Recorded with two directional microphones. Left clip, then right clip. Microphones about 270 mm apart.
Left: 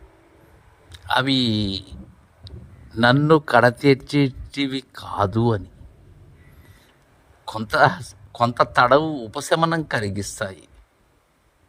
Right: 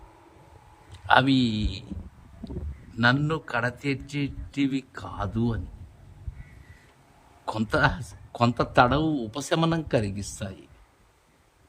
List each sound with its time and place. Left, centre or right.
1.0 s a man's voice: centre
2.9 s a man's voice: centre
7.5 s a man's voice: centre